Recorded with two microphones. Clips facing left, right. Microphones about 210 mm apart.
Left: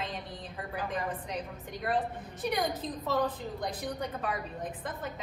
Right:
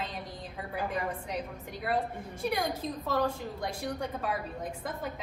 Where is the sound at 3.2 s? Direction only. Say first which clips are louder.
Right 1 dB; centre (ahead or behind).